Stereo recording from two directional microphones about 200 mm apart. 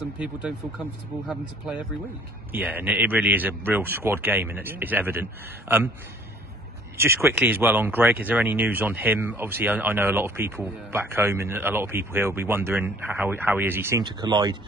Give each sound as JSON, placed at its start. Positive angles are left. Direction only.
{"t": 0.2, "sound": "speech", "side_deg": -5}
{"t": 7.0, "sound": "speech", "side_deg": -10}
{"t": 14.0, "sound": "speech", "side_deg": -20}